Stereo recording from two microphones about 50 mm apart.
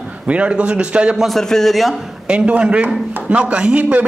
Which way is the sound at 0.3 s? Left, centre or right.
Right.